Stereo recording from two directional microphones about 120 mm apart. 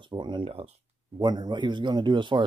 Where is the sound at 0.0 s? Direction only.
40° right (ahead or behind).